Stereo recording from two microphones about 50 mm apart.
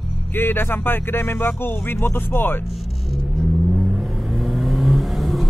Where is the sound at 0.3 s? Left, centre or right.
Left.